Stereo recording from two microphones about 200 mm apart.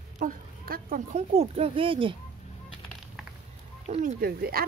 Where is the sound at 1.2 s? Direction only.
30° right (ahead or behind).